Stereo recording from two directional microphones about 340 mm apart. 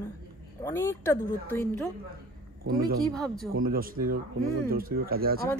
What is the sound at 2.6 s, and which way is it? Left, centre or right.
Speech, right.